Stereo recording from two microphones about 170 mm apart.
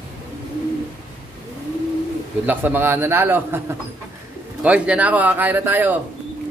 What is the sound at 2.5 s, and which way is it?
Speech, 10° right (ahead or behind).